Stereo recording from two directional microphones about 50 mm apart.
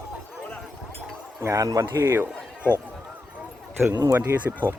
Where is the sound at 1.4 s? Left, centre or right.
Right.